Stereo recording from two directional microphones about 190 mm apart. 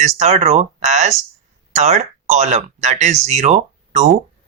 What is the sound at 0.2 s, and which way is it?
Speech, 35° right (ahead or behind).